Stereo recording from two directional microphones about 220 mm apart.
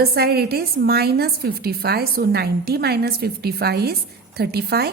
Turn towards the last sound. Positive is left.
turn(degrees=-45)  # may be behind; listen again after turning